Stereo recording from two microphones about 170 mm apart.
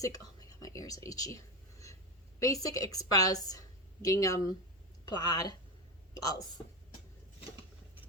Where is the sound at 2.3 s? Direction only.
20° left (ahead or behind).